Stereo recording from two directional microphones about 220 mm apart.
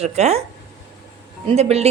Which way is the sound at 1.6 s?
30° right (ahead or behind).